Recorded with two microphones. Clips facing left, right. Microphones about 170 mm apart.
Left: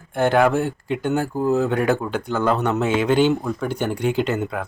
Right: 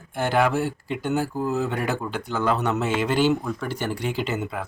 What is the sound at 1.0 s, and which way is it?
Speech, 50° left (ahead or behind).